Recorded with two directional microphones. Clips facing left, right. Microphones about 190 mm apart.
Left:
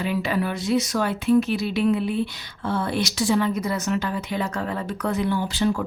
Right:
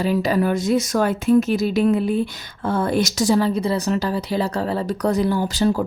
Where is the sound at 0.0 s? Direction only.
40° right (ahead or behind).